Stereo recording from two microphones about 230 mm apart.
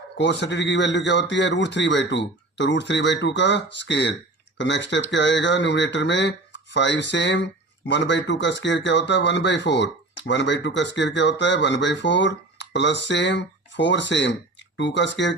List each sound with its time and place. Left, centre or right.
0.2 s speech: left